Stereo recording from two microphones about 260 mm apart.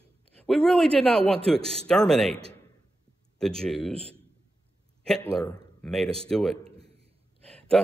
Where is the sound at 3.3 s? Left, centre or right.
Centre.